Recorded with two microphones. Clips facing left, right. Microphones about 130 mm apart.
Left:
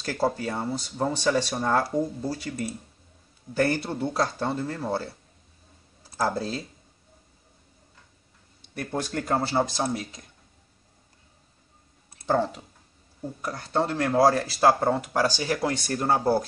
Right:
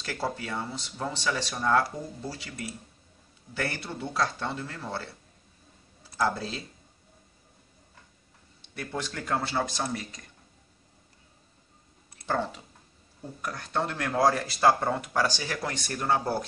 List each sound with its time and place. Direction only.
0.0 s speech: 40° left (ahead or behind)
6.1 s speech: 40° left (ahead or behind)
8.7 s speech: 40° left (ahead or behind)
12.3 s speech: 40° left (ahead or behind)